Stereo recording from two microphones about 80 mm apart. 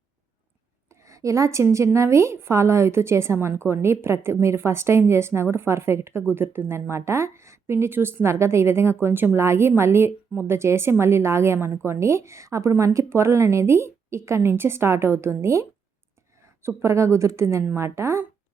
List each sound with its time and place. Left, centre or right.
0.9 s a woman's voice: right
16.6 s a woman's voice: right